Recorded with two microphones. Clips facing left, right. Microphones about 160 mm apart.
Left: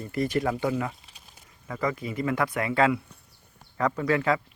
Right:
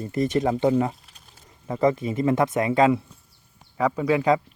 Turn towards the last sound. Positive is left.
turn(degrees=-15)  # may be behind; listen again after turning